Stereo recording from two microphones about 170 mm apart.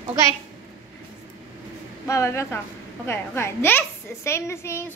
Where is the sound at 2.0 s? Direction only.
15° left (ahead or behind).